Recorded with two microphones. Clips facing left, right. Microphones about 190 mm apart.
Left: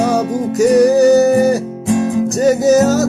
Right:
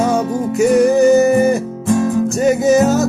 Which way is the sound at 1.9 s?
15° left (ahead or behind).